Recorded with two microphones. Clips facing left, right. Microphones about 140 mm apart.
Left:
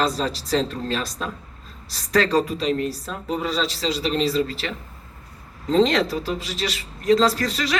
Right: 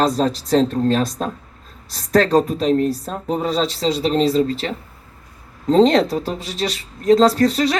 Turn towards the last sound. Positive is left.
turn(degrees=-50)  # may be behind; listen again after turning